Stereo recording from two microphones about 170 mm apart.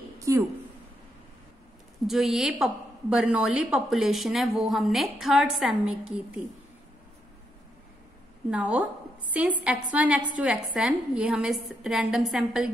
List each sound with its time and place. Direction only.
0.2 s a sound: 20° right (ahead or behind)
2.0 s a woman's voice: centre (ahead or behind)
8.5 s a woman's voice: 10° right (ahead or behind)